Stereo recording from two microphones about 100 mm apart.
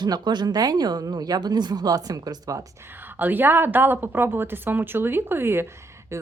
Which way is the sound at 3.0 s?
20° right (ahead or behind).